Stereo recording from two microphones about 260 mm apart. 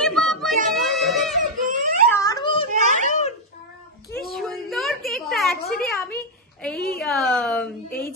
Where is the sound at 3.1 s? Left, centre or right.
Left.